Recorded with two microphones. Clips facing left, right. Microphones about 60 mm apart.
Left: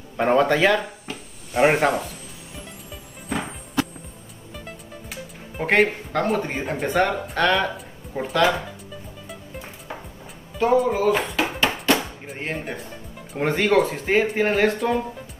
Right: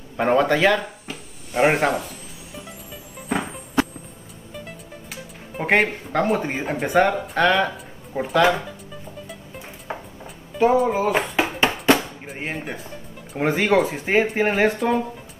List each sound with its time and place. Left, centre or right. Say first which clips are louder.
0.2 s speech: even; centre
5.1 s speech: right 2 dB; centre
9.9 s music: right 4 dB; right
10.9 s speech: even; centre
11.6 s music: right 3 dB; right
12.3 s speech: left 1 dB; centre